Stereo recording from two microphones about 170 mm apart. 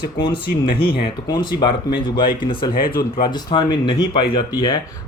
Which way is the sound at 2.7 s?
60° left (ahead or behind).